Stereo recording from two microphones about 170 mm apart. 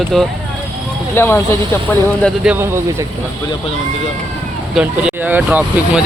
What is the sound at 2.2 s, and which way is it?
Speech, 5° right (ahead or behind).